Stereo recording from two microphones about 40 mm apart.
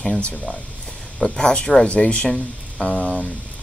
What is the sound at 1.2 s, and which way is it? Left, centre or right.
Speech, centre.